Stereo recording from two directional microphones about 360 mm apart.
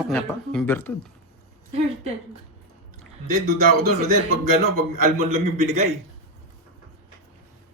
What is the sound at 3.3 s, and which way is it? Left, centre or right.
A man's voice, right.